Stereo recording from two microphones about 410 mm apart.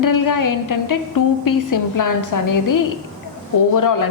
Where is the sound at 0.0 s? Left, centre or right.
Left.